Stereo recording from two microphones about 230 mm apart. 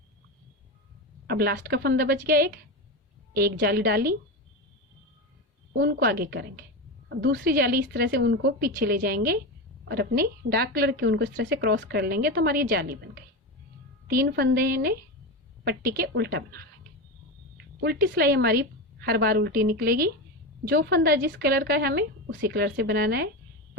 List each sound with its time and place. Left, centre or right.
1.3 s a woman's voice: right
5.7 s a woman's voice: right
14.1 s a woman's voice: right
17.8 s a woman's voice: right